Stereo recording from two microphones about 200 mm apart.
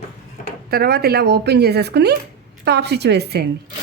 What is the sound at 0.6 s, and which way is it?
Speech, 50° right (ahead or behind).